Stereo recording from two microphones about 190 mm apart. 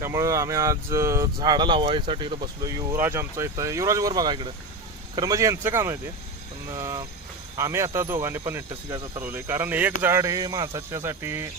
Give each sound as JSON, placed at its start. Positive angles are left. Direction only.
{"t": 0.0, "sound": "speech", "side_deg": -15}